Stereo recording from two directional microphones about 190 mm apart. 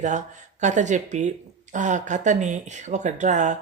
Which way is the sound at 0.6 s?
40° right (ahead or behind).